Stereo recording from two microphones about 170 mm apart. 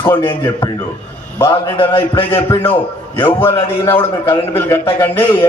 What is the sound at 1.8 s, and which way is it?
Speech, 30° left (ahead or behind).